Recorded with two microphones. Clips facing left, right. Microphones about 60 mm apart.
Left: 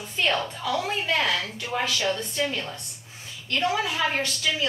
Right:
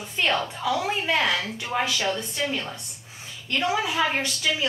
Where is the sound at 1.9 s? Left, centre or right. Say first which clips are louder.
Left 1 dB; centre.